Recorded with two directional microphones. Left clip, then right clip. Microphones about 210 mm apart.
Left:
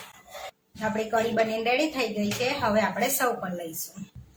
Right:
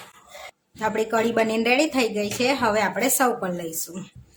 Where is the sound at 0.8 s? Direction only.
50° right (ahead or behind).